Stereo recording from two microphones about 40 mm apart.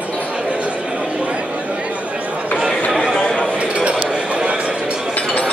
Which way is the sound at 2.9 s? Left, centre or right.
Centre.